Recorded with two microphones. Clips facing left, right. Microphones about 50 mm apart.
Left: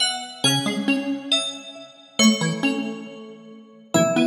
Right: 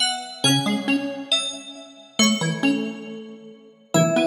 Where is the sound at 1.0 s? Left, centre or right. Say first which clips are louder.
Left 2 dB; centre.